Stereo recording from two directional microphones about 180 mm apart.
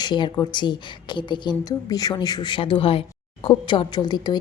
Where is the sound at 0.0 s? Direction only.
25° left (ahead or behind).